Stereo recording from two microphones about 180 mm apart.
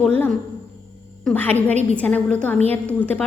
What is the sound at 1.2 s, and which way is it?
A woman's voice, 10° left (ahead or behind).